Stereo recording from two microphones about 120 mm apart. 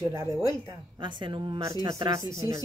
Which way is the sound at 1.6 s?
30° right (ahead or behind).